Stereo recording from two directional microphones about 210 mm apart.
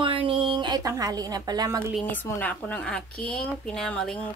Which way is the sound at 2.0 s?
10° left (ahead or behind).